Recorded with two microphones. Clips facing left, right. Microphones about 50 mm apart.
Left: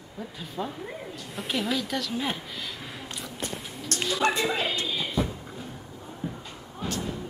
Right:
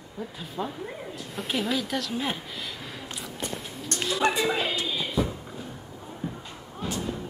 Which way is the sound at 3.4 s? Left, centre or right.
Centre.